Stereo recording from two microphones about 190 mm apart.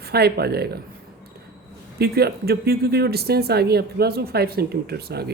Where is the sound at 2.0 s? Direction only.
55° right (ahead or behind).